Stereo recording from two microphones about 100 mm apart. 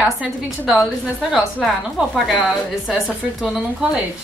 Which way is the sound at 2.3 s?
Centre (ahead or behind).